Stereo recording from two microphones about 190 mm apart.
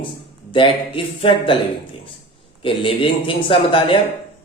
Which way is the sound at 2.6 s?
25° left (ahead or behind).